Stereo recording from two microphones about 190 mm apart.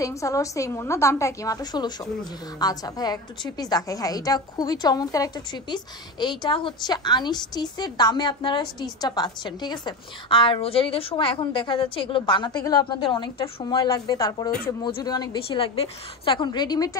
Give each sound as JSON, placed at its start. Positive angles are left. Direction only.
{"t": 0.0, "sound": "a woman's voice", "side_deg": 15}